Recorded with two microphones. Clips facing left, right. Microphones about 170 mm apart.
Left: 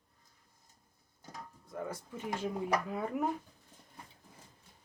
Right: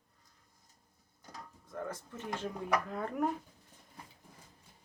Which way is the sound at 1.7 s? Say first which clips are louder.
Left 1 dB; 10° left (ahead or behind).